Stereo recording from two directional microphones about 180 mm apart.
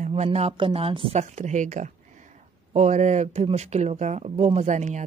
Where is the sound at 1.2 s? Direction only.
45° right (ahead or behind).